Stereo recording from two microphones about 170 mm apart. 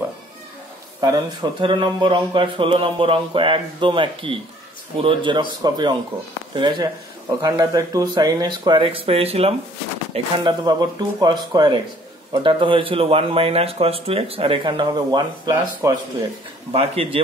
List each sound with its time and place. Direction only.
1.0 s speech: 25° right (ahead or behind)
10.1 s speech: 25° right (ahead or behind)
16.7 s speech: 35° right (ahead or behind)